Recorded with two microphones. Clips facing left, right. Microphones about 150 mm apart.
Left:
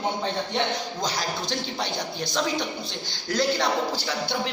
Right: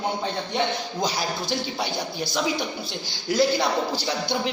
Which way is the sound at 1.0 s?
10° right (ahead or behind).